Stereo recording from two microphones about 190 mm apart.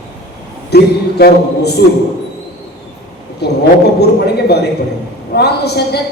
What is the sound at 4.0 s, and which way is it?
A man's voice, 60° left (ahead or behind).